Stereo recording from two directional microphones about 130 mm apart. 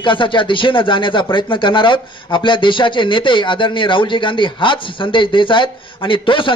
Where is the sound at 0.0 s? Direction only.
40° left (ahead or behind).